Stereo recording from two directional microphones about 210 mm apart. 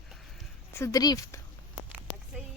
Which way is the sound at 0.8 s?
15° left (ahead or behind).